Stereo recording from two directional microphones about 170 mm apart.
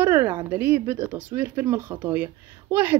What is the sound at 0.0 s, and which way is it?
Speech, 15° right (ahead or behind).